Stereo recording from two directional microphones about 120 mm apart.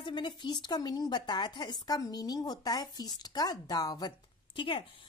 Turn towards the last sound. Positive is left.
turn(degrees=45)  # may be behind; listen again after turning